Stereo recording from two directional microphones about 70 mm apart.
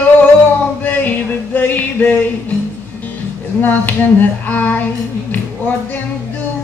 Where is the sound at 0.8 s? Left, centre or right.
Left.